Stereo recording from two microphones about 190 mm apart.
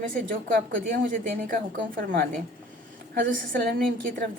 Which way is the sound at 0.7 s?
45° right (ahead or behind).